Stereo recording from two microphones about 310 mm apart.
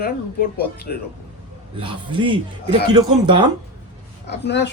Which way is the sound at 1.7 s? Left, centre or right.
Centre.